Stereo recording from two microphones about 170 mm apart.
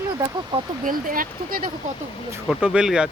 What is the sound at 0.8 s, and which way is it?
Speech, 55° right (ahead or behind).